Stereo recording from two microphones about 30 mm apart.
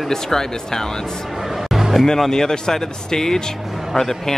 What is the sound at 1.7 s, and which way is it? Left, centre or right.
Vehicle, centre.